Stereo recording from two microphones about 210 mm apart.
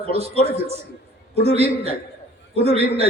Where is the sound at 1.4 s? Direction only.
30° right (ahead or behind).